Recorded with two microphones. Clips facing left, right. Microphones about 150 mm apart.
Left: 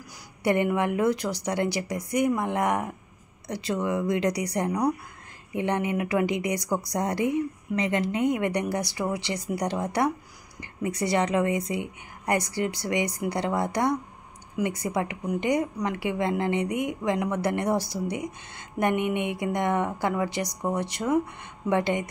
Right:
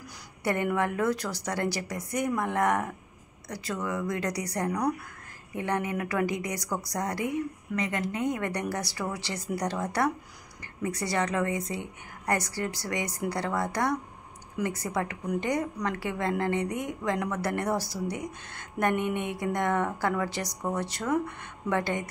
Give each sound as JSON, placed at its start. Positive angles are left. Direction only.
{"t": 0.4, "sound": "a woman's voice", "side_deg": 20}